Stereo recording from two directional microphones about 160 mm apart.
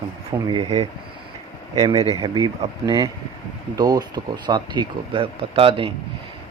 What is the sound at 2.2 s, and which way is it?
Speech, 25° right (ahead or behind).